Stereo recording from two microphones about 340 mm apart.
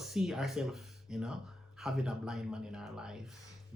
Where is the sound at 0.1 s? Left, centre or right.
Centre.